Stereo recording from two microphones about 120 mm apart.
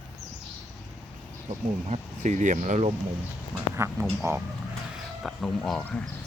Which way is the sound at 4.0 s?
25° right (ahead or behind).